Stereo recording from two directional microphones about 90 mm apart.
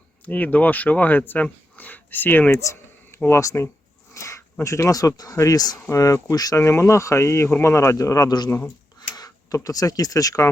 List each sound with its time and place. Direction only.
0.3 s speech: 20° left (ahead or behind)
3.2 s speech: 30° left (ahead or behind)
4.1 s a sound: 35° left (ahead or behind)
4.6 s speech: 35° left (ahead or behind)
6.6 s speech: 30° left (ahead or behind)
9.0 s a sound: 45° left (ahead or behind)
9.6 s speech: 40° left (ahead or behind)